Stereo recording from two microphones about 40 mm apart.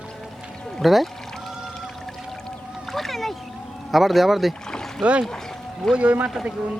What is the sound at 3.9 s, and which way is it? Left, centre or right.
Speech, centre.